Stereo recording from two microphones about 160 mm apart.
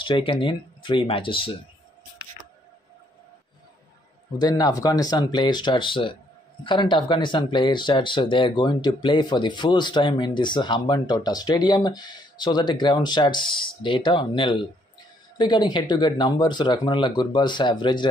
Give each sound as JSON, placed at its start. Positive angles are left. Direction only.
{"t": 0.0, "sound": "speech", "side_deg": 35}
{"t": 4.4, "sound": "speech", "side_deg": 25}